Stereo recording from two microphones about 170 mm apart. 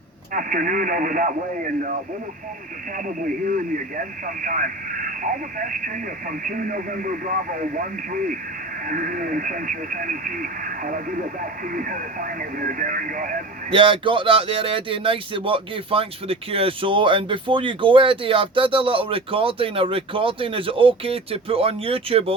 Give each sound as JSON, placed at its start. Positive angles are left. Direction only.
{"t": 0.3, "sound": "speech", "side_deg": -50}
{"t": 3.2, "sound": "speech", "side_deg": -50}
{"t": 13.7, "sound": "speech", "side_deg": -30}